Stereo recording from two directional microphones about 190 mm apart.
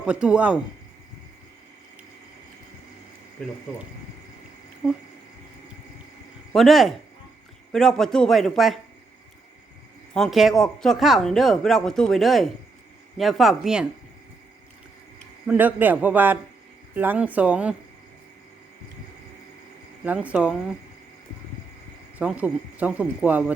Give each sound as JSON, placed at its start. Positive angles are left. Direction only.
{"t": 0.0, "sound": "speech", "side_deg": -5}
{"t": 4.8, "sound": "speech", "side_deg": 0}
{"t": 6.5, "sound": "speech", "side_deg": 0}
{"t": 10.2, "sound": "speech", "side_deg": 0}
{"t": 15.4, "sound": "speech", "side_deg": -10}
{"t": 20.1, "sound": "speech", "side_deg": -5}
{"t": 22.2, "sound": "speech", "side_deg": -5}